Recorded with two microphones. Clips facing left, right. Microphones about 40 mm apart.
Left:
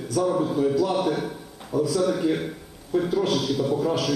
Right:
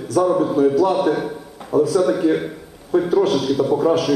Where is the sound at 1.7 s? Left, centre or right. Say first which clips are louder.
Right 7 dB; right.